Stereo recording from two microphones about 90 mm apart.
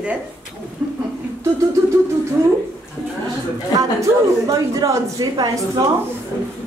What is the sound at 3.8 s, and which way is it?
Speech, 40° right (ahead or behind).